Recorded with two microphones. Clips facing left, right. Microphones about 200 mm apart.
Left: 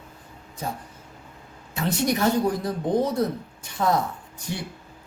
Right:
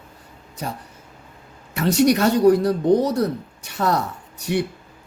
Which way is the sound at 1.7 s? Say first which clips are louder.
Right 7 dB; 75° right (ahead or behind).